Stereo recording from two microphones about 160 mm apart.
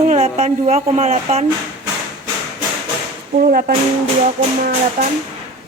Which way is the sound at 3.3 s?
65° right (ahead or behind).